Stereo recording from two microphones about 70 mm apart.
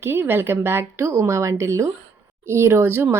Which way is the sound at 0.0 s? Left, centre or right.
Right.